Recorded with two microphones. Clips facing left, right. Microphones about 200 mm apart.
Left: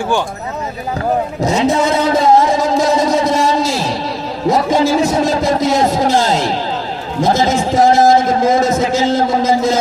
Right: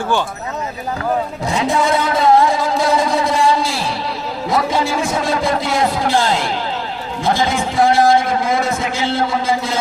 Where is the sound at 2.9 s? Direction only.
40° left (ahead or behind).